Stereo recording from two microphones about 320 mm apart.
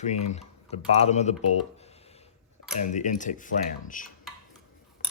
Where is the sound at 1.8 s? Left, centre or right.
Centre.